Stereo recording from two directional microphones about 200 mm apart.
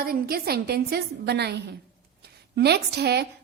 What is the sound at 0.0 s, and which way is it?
A woman's voice, 50° right (ahead or behind).